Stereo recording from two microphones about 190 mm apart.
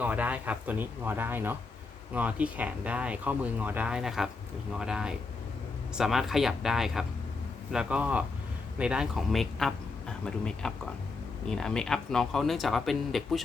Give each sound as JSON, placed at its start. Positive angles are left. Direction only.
{"t": 0.0, "sound": "speech", "side_deg": -10}